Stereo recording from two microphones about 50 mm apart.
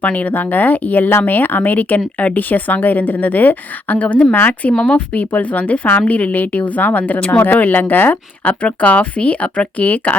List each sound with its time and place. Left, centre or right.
0.0 s speech: left
4.0 s speech: left
7.3 s speech: left
8.6 s speech: left